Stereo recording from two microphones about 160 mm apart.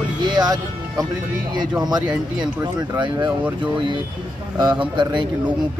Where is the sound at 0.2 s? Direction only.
25° right (ahead or behind).